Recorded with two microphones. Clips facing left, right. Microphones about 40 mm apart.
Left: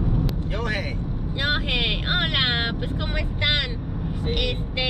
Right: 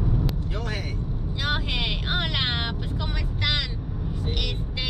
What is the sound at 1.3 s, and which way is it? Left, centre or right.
Vehicle, left.